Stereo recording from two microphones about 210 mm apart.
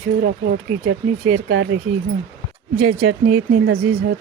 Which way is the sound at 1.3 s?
75° right (ahead or behind).